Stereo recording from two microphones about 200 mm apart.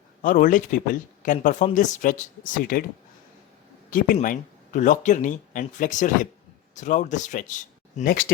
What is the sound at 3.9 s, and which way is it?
Speech, 40° left (ahead or behind).